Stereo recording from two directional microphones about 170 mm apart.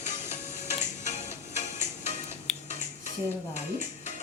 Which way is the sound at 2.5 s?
Centre (ahead or behind).